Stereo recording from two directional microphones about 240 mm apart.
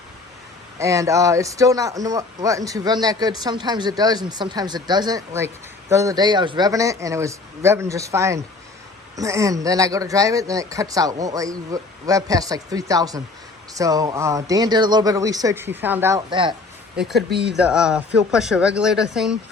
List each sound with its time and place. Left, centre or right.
0.8 s a man's voice: centre
17.0 s speech: centre
17.2 s speech: right
17.5 s speech: centre